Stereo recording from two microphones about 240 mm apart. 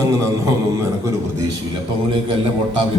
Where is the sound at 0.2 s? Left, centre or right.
Centre.